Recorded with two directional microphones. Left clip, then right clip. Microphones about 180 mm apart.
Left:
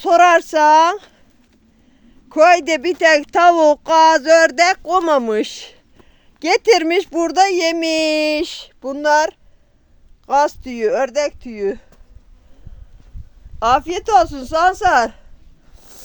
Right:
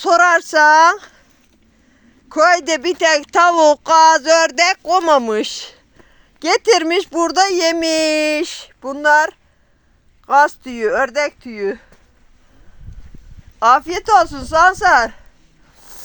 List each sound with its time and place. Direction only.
0.0 s a child's voice: 20° left (ahead or behind)
2.3 s a child's voice: 25° left (ahead or behind); by 11.9 s 10° left (ahead or behind)
13.6 s a child's voice: 20° left (ahead or behind)
15.8 s a sound: 25° left (ahead or behind)